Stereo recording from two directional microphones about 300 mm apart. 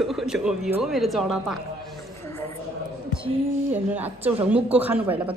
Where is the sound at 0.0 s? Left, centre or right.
Centre.